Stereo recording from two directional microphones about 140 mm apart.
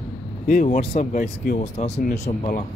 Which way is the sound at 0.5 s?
60° left (ahead or behind).